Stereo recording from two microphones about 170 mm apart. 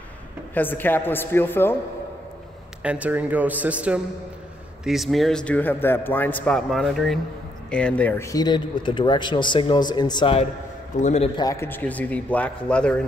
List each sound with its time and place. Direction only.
0.6 s a man's voice: 10° left (ahead or behind)
2.8 s a man's voice: 10° right (ahead or behind); by 10.4 s 30° left (ahead or behind)
11.0 s a man's voice: 45° left (ahead or behind)
11.3 s a man's voice: 20° left (ahead or behind)